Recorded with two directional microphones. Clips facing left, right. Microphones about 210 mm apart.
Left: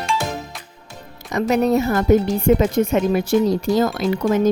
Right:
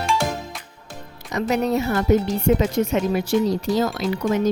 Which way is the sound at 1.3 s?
45° left (ahead or behind).